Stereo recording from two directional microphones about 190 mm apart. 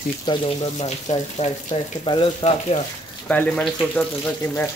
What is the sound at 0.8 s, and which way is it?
Speech, 35° left (ahead or behind).